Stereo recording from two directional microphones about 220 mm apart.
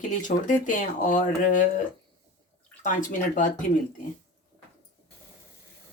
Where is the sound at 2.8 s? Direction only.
35° left (ahead or behind).